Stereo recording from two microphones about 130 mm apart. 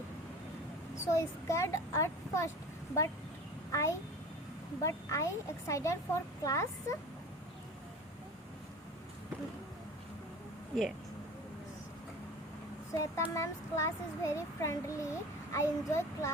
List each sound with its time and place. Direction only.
0.9 s speech: 25° left (ahead or behind)
3.7 s a child's voice: 25° left (ahead or behind)
12.9 s speech: 25° left (ahead or behind)